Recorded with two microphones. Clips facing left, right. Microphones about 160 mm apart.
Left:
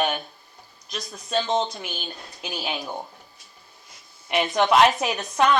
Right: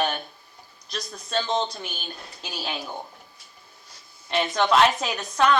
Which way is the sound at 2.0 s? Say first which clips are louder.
Left 2 dB; 15° left (ahead or behind).